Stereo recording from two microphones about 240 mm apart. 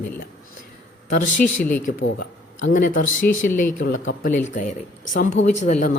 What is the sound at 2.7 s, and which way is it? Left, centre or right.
Speech, left.